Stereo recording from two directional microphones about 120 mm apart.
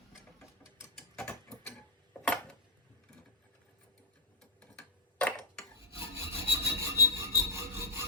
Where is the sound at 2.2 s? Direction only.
10° left (ahead or behind).